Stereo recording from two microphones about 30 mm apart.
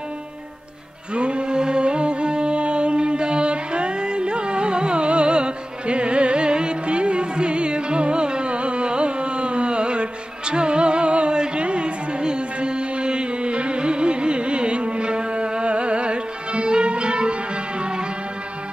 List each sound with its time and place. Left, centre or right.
1.1 s music: right